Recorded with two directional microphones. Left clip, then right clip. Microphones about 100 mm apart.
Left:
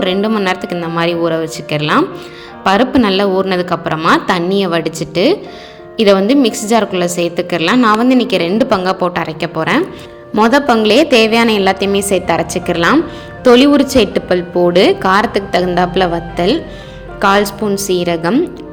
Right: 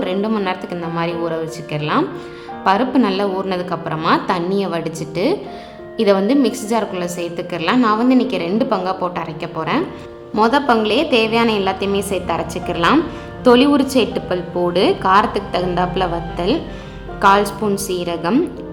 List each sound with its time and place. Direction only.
0.0 s a woman's voice: 35° left (ahead or behind)
13.4 s a woman's voice: 25° left (ahead or behind)